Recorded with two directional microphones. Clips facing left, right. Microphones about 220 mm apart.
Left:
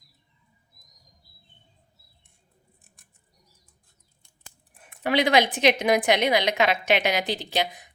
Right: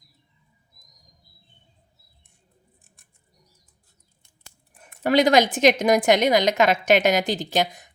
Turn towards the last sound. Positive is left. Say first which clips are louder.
# right 4 dB
turn(degrees=-45)  # may be behind; listen again after turning